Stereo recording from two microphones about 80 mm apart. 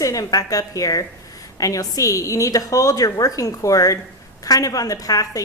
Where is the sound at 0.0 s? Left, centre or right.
Left.